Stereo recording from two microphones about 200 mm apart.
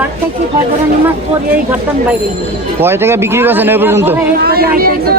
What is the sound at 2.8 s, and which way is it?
A man's voice, 10° right (ahead or behind).